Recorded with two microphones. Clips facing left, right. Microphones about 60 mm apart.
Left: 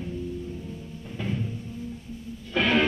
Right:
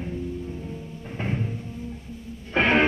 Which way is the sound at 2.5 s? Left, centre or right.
Right.